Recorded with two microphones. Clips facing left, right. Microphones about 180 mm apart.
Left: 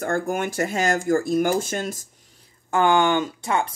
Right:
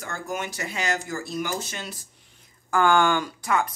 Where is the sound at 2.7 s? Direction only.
20° left (ahead or behind).